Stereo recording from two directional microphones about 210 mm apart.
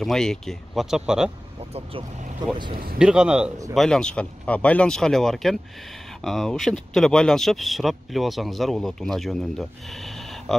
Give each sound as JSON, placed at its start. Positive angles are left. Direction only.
{"t": 0.0, "sound": "speech", "side_deg": 0}
{"t": 1.7, "sound": "speech", "side_deg": -30}
{"t": 2.7, "sound": "speech", "side_deg": -45}
{"t": 3.0, "sound": "speech", "side_deg": -5}